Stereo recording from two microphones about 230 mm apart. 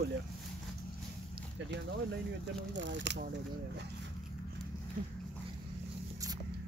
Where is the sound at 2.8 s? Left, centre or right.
Right.